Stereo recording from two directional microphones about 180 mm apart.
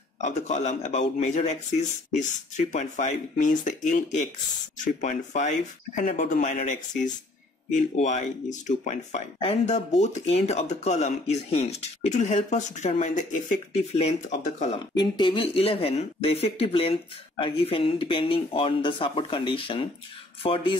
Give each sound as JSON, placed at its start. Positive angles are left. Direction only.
{"t": 0.2, "sound": "speech", "side_deg": 40}
{"t": 15.0, "sound": "speech", "side_deg": 25}